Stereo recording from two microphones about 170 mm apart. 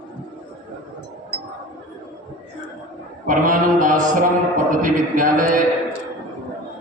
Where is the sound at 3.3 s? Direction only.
50° right (ahead or behind).